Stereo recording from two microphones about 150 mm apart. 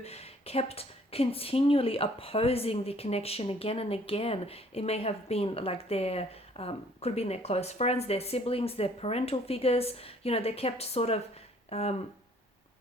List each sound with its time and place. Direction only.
0.0 s a woman's voice: 45° left (ahead or behind)